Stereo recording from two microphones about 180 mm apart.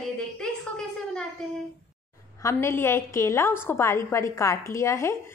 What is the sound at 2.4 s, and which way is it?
A woman's voice, 15° left (ahead or behind).